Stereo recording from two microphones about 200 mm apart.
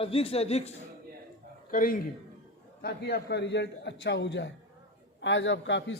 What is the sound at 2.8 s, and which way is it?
A man's voice, 55° left (ahead or behind).